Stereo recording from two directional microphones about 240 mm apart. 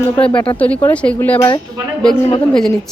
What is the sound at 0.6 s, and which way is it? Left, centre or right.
Speech, centre.